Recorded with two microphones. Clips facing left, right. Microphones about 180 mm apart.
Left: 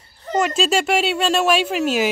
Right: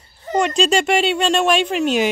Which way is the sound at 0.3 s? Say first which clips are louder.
Right 2 dB; 5° left (ahead or behind).